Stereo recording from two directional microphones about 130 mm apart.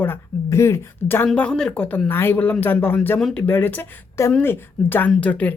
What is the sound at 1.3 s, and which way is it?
Speech, 5° left (ahead or behind).